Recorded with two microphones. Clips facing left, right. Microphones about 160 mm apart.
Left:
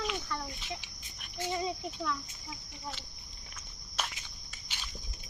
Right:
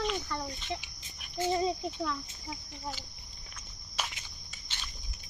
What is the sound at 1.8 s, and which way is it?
Speech, 20° right (ahead or behind).